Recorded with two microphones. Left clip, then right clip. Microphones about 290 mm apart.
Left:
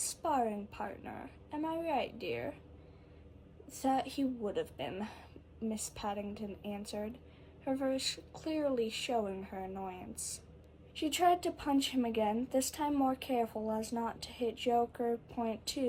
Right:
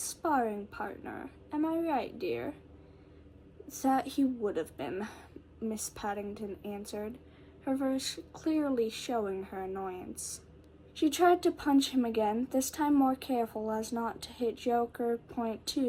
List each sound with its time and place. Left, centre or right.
0.3 s a woman's voice: left
3.7 s a woman's voice: left